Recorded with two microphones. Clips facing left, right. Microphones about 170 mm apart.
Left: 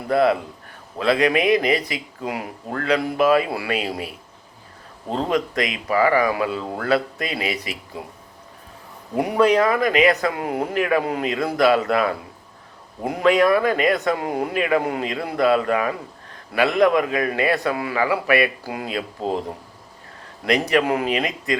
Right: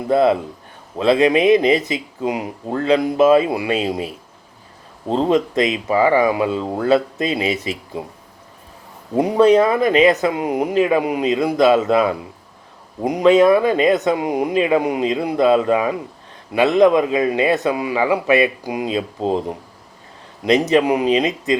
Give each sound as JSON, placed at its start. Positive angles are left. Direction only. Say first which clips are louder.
{"t": 0.1, "sound": "speech", "louder": "right 3 dB", "side_deg": -25}
{"t": 9.1, "sound": "speech", "louder": "right 5 dB", "side_deg": -20}